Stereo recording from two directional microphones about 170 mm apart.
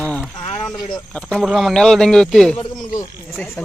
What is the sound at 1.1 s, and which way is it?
Speech, 5° left (ahead or behind).